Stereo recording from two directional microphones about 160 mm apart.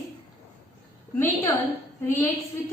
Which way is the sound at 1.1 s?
15° left (ahead or behind).